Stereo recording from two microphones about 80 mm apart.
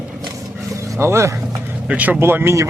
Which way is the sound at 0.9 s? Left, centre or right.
Right.